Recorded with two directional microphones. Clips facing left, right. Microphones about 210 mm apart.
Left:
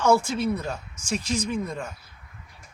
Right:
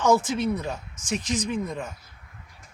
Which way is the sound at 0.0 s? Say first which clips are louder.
Even; 20° right (ahead or behind).